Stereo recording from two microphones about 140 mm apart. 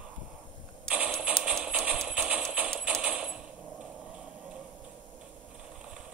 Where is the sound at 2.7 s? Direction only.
5° right (ahead or behind).